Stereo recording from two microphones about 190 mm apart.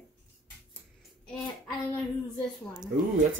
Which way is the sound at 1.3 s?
5° left (ahead or behind).